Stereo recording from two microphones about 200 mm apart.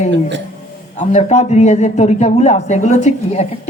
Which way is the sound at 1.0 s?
35° left (ahead or behind).